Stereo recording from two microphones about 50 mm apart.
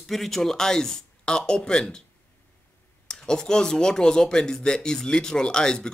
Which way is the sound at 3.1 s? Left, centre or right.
Centre.